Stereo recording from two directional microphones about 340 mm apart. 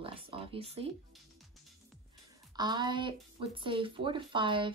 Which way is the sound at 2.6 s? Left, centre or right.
Centre.